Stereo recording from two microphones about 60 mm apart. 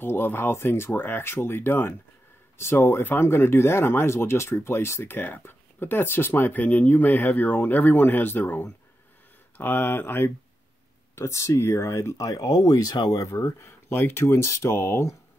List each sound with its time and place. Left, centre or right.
0.0 s speech: left
5.1 s speech: left
11.1 s speech: left
13.5 s speech: left
14.2 s speech: left